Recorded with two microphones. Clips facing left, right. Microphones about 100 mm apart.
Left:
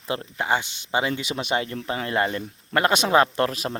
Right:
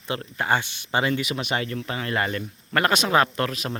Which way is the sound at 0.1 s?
20° left (ahead or behind).